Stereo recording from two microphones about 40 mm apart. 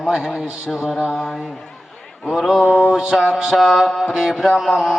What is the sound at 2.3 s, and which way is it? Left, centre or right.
Speech, centre.